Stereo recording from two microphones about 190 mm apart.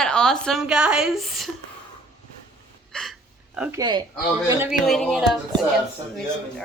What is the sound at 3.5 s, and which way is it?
Speech, 5° right (ahead or behind).